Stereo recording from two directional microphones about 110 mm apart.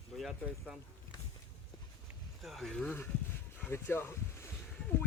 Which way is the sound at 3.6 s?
20° left (ahead or behind).